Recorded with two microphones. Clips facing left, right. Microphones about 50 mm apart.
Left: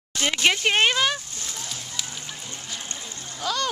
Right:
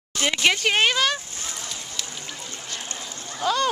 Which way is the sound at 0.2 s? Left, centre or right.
Centre.